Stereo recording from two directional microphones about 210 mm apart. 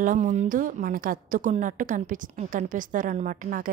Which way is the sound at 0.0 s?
40° right (ahead or behind).